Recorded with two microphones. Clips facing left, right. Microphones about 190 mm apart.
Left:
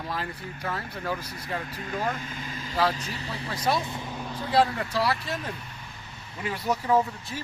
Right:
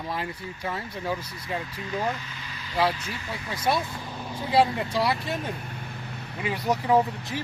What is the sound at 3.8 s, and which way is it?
Speech, 20° left (ahead or behind).